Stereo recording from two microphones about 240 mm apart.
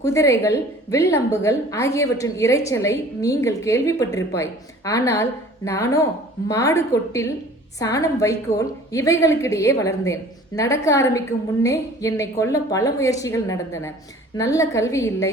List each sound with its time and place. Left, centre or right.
0.0 s a woman's voice: centre